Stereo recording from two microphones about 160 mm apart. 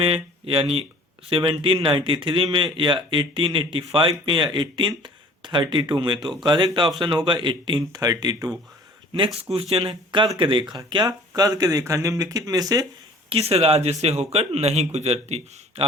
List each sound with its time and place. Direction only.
0.0 s a man's voice: 35° right (ahead or behind)
9.1 s a man's voice: 35° right (ahead or behind)
13.3 s a man's voice: 40° right (ahead or behind)